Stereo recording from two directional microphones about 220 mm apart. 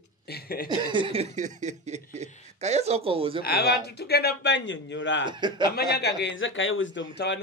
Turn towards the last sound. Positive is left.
turn(degrees=55)  # may be behind; listen again after turning